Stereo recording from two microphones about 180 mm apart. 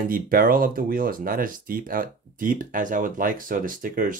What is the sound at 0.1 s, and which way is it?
Speech, 55° right (ahead or behind).